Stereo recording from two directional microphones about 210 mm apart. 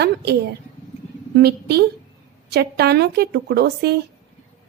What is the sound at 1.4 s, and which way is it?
A woman's voice, 50° right (ahead or behind).